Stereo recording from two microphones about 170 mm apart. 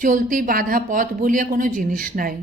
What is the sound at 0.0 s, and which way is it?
A woman's voice, 50° right (ahead or behind).